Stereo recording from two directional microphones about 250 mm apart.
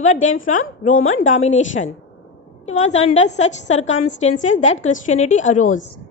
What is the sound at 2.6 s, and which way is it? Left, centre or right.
A woman's voice, left.